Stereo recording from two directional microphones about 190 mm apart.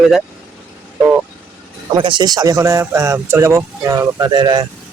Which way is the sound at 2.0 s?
25° right (ahead or behind).